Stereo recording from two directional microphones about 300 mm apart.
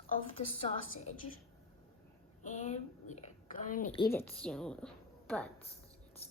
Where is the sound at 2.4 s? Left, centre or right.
Left.